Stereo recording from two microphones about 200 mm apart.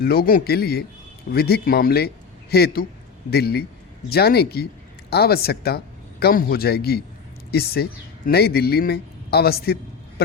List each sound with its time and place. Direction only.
0.0 s speech: 50° left (ahead or behind)